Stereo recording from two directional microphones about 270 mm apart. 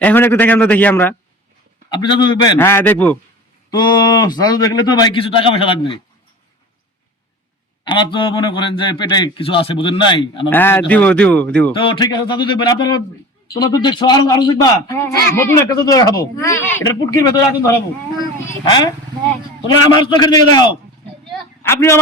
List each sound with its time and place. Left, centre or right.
0.0 s a man's voice: centre
1.9 s a man's voice: centre
7.9 s a man's voice: centre
11.8 s a man's voice: centre
20.0 s a man's voice: centre
21.3 s a sound: centre